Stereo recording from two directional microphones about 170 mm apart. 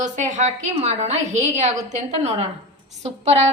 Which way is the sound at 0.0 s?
45° right (ahead or behind).